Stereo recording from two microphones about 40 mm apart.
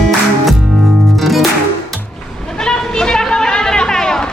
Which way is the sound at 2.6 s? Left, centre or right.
Centre.